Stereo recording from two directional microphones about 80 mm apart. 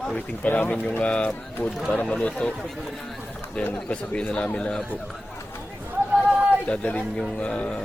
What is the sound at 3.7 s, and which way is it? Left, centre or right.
Speech, centre.